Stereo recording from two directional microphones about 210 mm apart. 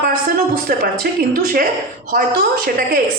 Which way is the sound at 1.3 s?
45° right (ahead or behind).